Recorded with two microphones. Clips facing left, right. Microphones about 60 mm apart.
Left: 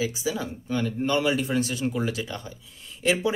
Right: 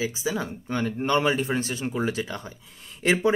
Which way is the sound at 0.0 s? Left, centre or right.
Right.